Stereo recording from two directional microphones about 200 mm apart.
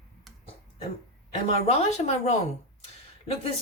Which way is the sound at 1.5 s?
30° left (ahead or behind).